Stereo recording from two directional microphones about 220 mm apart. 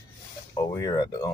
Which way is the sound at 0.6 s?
15° left (ahead or behind).